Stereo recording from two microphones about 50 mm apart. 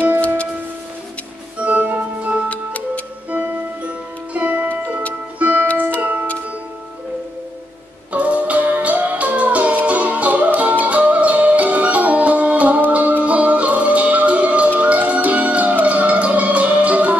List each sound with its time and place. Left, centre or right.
1.6 s music: right
8.1 s music: right